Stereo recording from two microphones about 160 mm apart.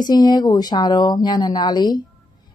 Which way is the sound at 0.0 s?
25° left (ahead or behind).